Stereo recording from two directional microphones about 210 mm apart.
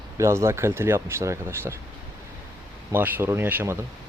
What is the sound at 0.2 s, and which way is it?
Speech, 15° right (ahead or behind).